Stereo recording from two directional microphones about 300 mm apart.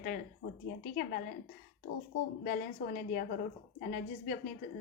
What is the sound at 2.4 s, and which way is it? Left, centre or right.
Speech, left.